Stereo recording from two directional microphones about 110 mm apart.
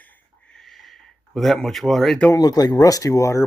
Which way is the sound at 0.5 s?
Centre (ahead or behind).